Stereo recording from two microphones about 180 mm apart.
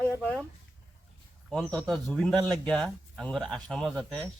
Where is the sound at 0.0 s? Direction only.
10° left (ahead or behind).